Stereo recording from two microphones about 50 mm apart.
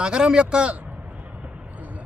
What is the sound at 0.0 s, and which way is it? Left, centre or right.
Speech, centre.